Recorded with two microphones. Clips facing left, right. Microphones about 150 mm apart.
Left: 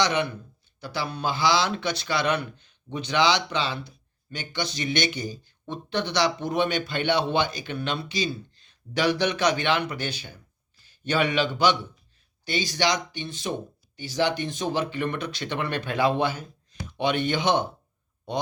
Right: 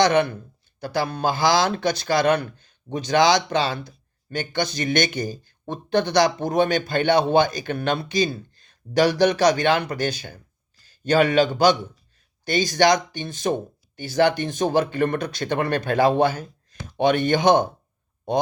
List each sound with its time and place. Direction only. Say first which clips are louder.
0.0 s a man's voice: right 6 dB; 50° right (ahead or behind)